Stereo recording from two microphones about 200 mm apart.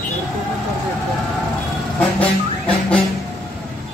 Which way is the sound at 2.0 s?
5° left (ahead or behind).